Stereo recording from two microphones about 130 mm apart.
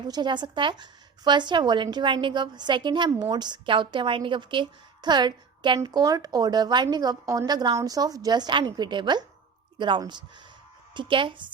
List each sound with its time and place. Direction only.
0.1 s a woman's voice: 35° right (ahead or behind)